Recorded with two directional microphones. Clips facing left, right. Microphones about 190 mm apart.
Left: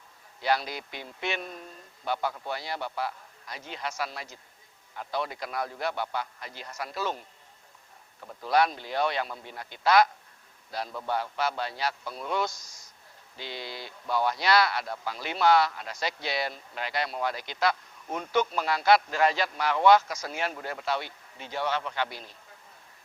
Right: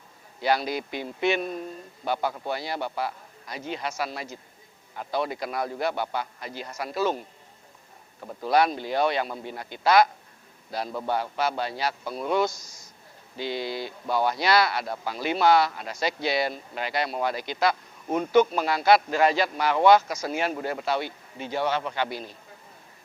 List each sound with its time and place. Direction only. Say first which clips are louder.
0.4 s speech: right 3 dB; 10° right (ahead or behind)
8.2 s speech: right 6 dB; 30° right (ahead or behind)
8.4 s speech: right 3 dB; 10° right (ahead or behind)
11.1 s speech: right 2 dB; 10° right (ahead or behind)